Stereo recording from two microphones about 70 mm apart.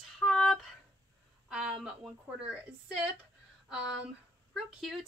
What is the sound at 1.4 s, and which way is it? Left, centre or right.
Speech, centre.